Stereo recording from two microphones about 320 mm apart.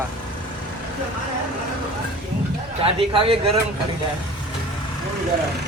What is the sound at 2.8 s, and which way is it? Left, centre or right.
Speech, centre.